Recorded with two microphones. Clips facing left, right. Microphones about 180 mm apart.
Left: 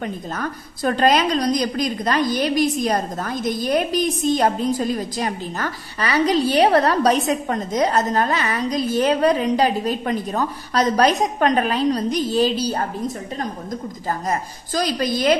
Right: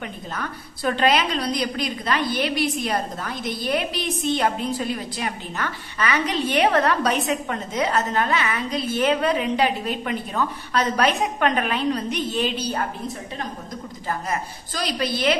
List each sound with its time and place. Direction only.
0.0 s a woman's voice: 45° left (ahead or behind)